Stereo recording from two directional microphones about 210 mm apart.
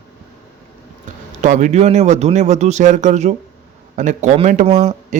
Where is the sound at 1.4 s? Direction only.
35° right (ahead or behind).